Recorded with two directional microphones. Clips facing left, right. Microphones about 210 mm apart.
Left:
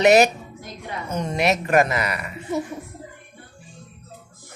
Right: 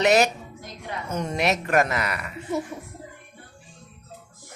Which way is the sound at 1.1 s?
5° right (ahead or behind).